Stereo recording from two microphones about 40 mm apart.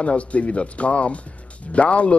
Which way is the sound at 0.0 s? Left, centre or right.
Left.